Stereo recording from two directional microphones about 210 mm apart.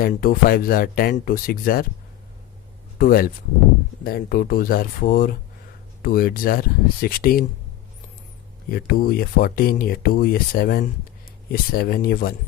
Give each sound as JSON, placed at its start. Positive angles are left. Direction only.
{"t": 0.0, "sound": "speech", "side_deg": 45}
{"t": 3.0, "sound": "speech", "side_deg": 45}
{"t": 8.7, "sound": "speech", "side_deg": 45}